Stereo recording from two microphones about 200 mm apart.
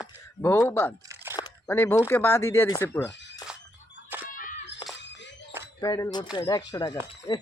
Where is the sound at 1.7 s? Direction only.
10° left (ahead or behind).